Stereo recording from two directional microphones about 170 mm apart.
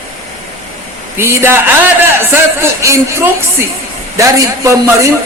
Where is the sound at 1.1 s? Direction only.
15° right (ahead or behind).